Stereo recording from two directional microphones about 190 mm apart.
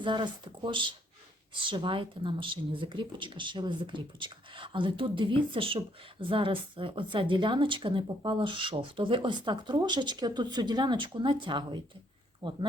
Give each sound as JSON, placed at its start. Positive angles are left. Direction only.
{"t": 0.0, "sound": "speech", "side_deg": -25}